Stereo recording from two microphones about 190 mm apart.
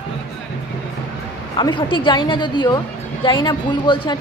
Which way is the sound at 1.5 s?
25° left (ahead or behind).